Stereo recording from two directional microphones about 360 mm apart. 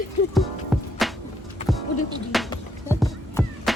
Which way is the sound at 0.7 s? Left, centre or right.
Centre.